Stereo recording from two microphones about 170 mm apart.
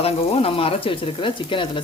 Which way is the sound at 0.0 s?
35° left (ahead or behind).